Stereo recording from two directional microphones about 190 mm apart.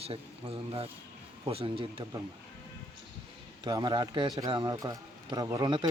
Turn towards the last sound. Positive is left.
turn(degrees=-25)  # may be behind; listen again after turning